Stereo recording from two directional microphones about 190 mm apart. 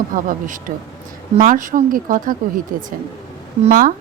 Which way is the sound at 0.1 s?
45° right (ahead or behind).